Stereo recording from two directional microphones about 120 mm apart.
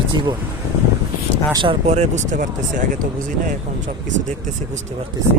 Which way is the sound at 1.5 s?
40° right (ahead or behind).